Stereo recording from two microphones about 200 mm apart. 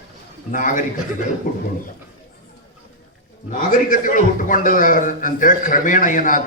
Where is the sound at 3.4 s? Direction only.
40° left (ahead or behind).